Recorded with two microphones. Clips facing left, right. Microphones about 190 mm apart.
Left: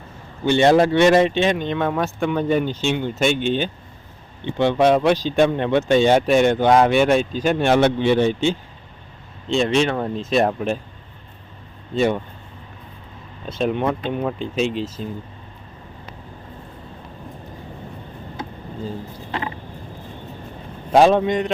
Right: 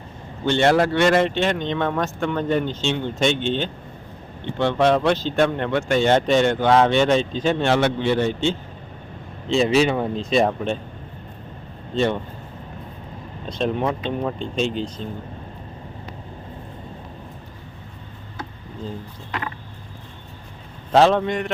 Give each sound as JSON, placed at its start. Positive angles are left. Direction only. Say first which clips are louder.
{"t": 0.4, "sound": "speech", "louder": "left 3 dB", "side_deg": 15}
{"t": 9.5, "sound": "speech", "louder": "right 1 dB", "side_deg": -5}
{"t": 13.5, "sound": "speech", "louder": "left 2 dB", "side_deg": 5}
{"t": 19.3, "sound": "a sound", "louder": "left 2 dB", "side_deg": 20}
{"t": 20.9, "sound": "speech", "louder": "left 2 dB", "side_deg": 15}